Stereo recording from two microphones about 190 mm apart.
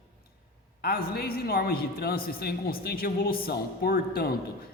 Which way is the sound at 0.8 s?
50° left (ahead or behind).